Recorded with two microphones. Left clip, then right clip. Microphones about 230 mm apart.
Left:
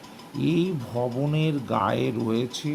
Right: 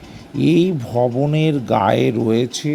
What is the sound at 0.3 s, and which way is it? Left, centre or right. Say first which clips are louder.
Speech: right 10 dB; right.